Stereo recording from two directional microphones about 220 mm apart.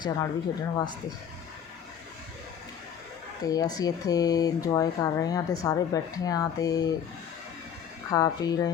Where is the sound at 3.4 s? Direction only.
15° left (ahead or behind).